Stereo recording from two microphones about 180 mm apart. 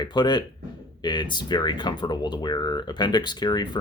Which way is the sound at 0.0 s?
25° left (ahead or behind).